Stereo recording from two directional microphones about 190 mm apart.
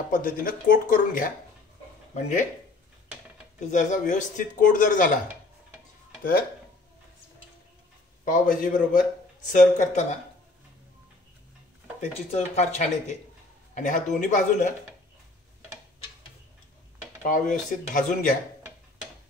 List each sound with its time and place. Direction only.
0.1 s speech: 45° left (ahead or behind)
3.5 s speech: 40° left (ahead or behind)
8.3 s speech: 45° left (ahead or behind)
12.0 s speech: 35° left (ahead or behind)
17.2 s speech: 45° left (ahead or behind)